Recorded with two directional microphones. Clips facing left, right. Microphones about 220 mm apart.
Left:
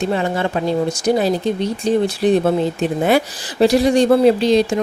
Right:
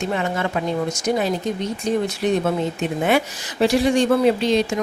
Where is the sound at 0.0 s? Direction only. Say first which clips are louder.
Left 4 dB; 35° left (ahead or behind).